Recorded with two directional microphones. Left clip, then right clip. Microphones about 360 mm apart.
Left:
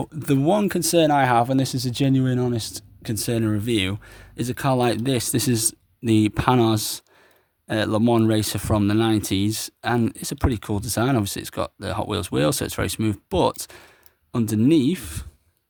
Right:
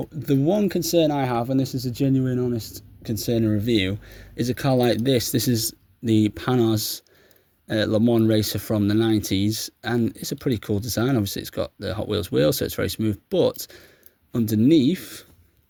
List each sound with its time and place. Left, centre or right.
0.1 s speech: centre